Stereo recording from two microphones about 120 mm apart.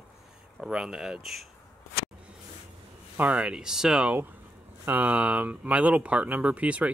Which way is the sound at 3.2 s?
10° right (ahead or behind).